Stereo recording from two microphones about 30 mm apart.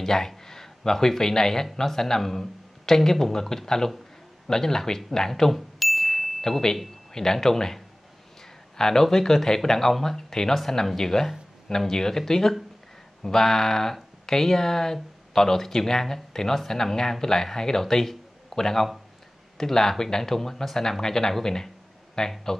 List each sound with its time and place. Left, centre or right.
0.0 s speech: centre
5.3 s a sound: centre
7.2 s speech: centre